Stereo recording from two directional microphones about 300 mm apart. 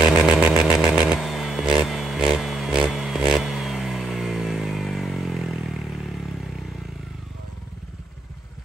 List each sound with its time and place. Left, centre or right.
0.0 s chainsaw: centre